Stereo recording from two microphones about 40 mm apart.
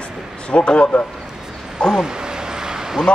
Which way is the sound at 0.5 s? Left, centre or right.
Left.